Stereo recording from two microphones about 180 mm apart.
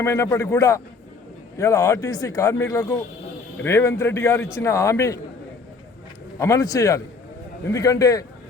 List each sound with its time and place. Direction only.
0.0 s a man's voice: 15° left (ahead or behind)
6.4 s speech: 20° left (ahead or behind)